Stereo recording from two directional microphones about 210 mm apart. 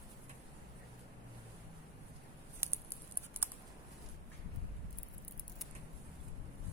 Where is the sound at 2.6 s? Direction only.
10° right (ahead or behind).